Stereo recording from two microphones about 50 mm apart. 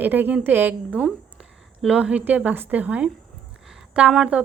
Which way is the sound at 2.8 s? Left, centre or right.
Right.